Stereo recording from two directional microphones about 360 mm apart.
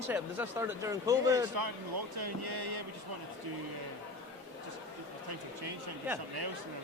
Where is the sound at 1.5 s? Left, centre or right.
Right.